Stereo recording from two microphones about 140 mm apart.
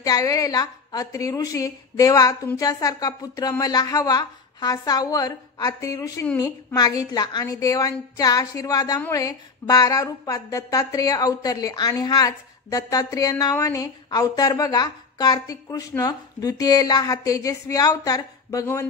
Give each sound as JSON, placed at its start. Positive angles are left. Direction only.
{"t": 0.0, "sound": "speech", "side_deg": 25}